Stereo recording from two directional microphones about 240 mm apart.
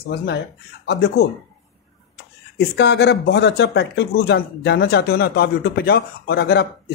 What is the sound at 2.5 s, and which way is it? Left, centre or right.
Speech, left.